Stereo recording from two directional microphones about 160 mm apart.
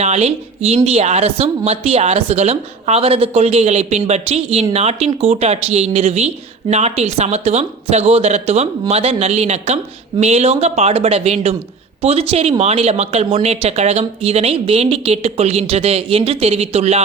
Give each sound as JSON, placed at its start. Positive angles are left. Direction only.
{"t": 0.0, "sound": "speech", "side_deg": -45}